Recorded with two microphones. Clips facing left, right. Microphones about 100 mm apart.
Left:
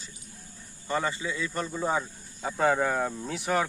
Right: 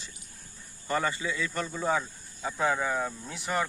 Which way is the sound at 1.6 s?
10° left (ahead or behind).